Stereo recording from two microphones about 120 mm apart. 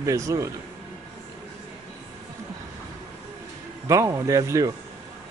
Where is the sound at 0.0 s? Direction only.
25° right (ahead or behind).